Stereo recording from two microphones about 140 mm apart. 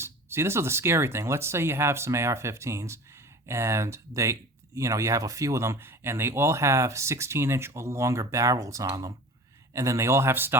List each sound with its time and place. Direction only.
0.0 s speech: 20° right (ahead or behind)